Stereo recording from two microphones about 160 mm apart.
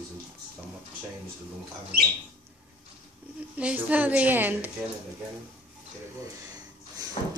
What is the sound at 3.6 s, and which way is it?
A woman's voice, 10° right (ahead or behind).